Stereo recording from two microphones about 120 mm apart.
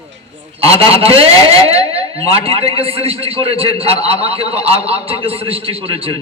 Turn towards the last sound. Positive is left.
turn(degrees=-50)  # may be behind; listen again after turning